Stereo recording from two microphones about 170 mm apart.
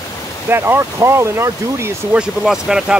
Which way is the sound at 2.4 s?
5° right (ahead or behind).